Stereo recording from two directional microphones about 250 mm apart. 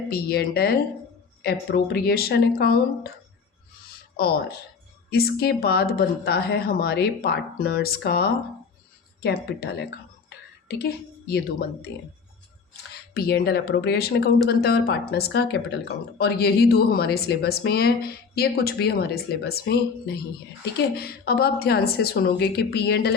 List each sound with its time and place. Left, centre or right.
0.1 s speech: left
4.2 s speech: left
10.2 s a sound: left
12.9 s speech: left
20.7 s speech: left